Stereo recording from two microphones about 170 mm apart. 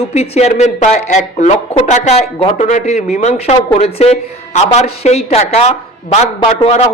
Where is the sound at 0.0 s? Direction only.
40° left (ahead or behind).